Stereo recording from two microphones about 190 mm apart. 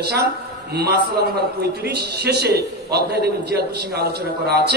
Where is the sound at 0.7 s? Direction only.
60° right (ahead or behind).